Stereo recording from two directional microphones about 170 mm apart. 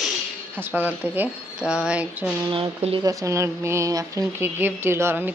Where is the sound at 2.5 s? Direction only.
35° right (ahead or behind).